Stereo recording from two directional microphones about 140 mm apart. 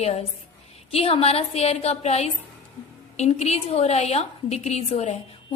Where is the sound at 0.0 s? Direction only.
50° left (ahead or behind).